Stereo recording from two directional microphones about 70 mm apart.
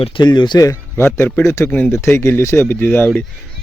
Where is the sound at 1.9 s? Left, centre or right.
Left.